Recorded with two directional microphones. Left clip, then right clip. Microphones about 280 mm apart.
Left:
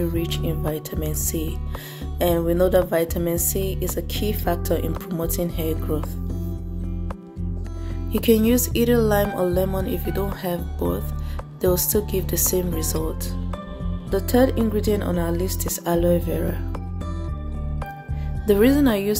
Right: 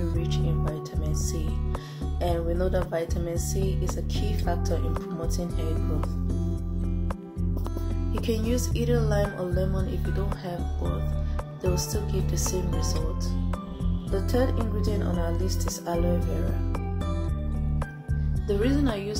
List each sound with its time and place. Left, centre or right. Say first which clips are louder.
1.0 s speech: left 6 dB; left
8.2 s speech: left 10 dB; left
14.1 s speech: left 8 dB; left
18.5 s speech: left 9 dB; left